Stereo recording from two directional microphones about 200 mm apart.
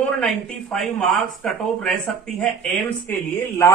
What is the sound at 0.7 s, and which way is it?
Speech, 5° left (ahead or behind).